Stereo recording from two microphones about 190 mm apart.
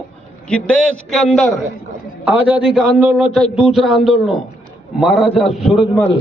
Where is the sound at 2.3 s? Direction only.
10° right (ahead or behind).